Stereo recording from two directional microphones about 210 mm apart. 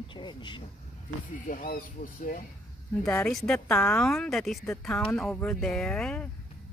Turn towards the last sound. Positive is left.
turn(degrees=5)  # may be behind; listen again after turning